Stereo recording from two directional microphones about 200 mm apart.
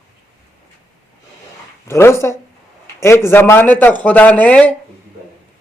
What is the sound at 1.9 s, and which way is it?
Speech, 15° left (ahead or behind).